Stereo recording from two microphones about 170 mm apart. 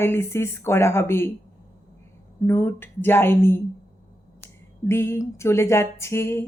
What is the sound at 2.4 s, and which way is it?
Speech, 15° left (ahead or behind).